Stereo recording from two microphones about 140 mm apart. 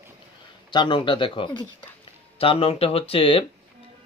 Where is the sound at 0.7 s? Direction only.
35° left (ahead or behind).